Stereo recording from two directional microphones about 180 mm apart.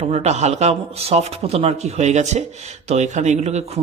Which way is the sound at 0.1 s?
35° right (ahead or behind).